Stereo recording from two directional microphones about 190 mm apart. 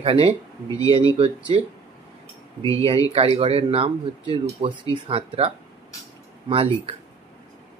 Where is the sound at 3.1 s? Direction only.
30° right (ahead or behind).